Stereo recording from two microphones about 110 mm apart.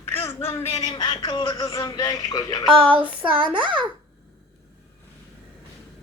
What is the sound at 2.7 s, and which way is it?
A woman's voice, 55° right (ahead or behind).